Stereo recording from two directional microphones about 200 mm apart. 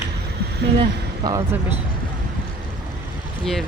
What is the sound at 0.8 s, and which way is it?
Speech, 20° right (ahead or behind).